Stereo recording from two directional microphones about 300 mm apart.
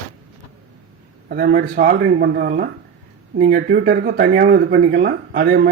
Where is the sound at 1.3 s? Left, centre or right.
Right.